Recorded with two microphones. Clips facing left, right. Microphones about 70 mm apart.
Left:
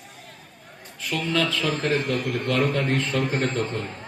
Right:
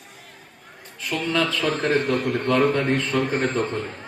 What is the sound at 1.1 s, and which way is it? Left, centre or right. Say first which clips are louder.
Speech: right 1 dB; right.